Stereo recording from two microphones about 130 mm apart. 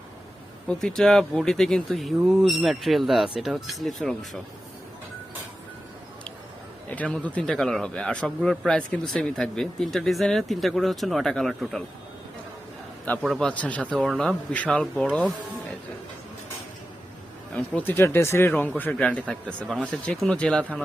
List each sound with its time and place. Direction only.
0.7 s a man's voice: 5° left (ahead or behind)
6.8 s a man's voice: 10° left (ahead or behind)
13.2 s a man's voice: 5° right (ahead or behind)
13.5 s speech: 10° left (ahead or behind)
17.5 s speech: 15° left (ahead or behind)